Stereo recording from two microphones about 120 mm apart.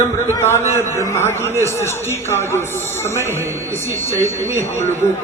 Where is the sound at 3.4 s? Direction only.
25° right (ahead or behind).